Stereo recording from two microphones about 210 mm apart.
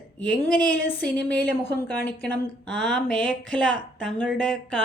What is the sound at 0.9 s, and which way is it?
A woman's voice, 5° left (ahead or behind).